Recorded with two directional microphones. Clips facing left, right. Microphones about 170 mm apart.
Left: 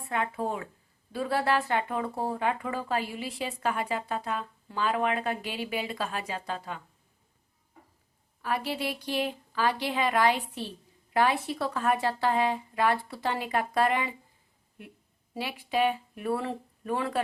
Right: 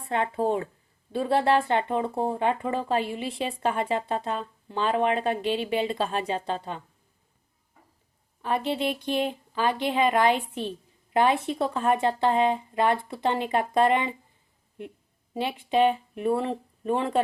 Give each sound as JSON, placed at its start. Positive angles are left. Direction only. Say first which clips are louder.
{"t": 0.1, "sound": "speech", "louder": "right 5 dB", "side_deg": -30}
{"t": 8.4, "sound": "speech", "louder": "right 4 dB", "side_deg": -25}